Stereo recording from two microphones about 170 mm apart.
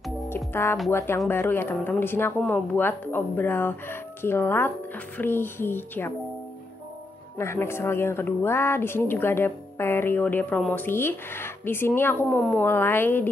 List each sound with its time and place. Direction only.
0.5 s speech: 15° left (ahead or behind)
7.3 s speech: 15° left (ahead or behind)